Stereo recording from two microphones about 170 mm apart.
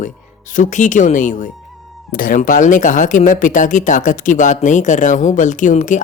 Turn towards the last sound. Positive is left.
turn(degrees=50)  # may be behind; listen again after turning